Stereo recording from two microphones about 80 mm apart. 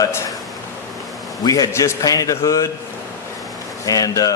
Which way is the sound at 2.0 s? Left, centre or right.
Left.